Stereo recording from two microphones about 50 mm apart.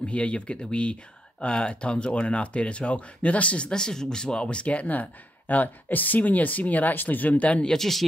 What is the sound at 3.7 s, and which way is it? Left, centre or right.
Speech, centre.